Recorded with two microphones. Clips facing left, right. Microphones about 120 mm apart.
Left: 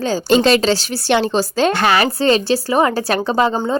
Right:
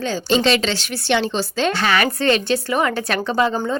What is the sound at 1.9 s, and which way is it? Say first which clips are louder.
A woman's voice: left 3 dB; 35° left (ahead or behind).